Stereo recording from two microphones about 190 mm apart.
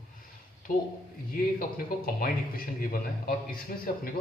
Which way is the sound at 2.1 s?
50° left (ahead or behind).